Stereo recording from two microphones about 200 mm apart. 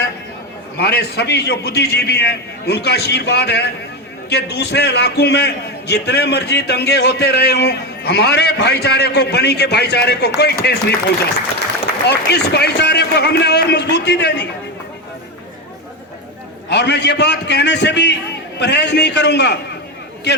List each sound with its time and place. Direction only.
0.8 s a man's voice: 55° left (ahead or behind)
16.6 s a man's voice: 60° left (ahead or behind)